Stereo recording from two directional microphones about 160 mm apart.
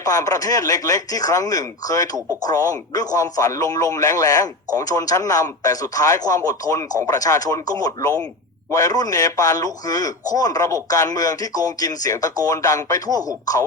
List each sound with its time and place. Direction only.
0.0 s speech: 20° left (ahead or behind)